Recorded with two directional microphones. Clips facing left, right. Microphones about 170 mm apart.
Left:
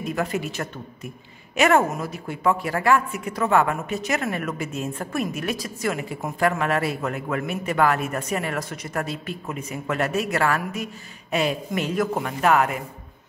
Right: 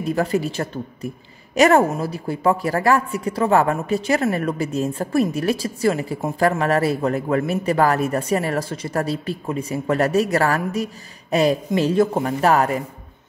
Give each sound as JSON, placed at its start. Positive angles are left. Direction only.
{"t": 0.0, "sound": "a woman's voice", "side_deg": -35}